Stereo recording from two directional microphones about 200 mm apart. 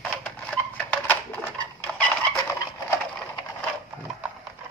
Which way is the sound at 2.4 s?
10° left (ahead or behind).